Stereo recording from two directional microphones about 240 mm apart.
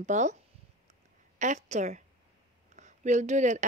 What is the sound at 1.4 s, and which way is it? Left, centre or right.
A woman's voice, right.